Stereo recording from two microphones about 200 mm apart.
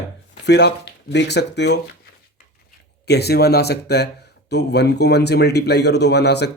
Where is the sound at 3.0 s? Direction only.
55° left (ahead or behind).